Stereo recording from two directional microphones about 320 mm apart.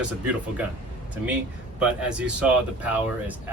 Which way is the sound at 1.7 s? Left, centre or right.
Centre.